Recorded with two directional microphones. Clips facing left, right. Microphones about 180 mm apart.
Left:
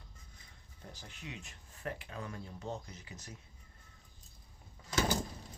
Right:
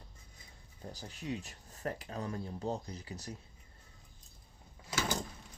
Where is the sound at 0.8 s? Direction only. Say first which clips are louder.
Right 5 dB; 35° right (ahead or behind).